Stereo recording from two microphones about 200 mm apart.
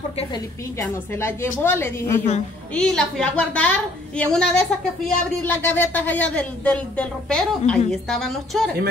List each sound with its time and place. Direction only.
0.2 s a woman's voice: 20° left (ahead or behind); by 8.7 s centre (ahead or behind)